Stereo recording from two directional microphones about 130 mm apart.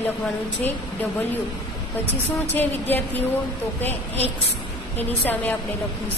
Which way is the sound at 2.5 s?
15° left (ahead or behind).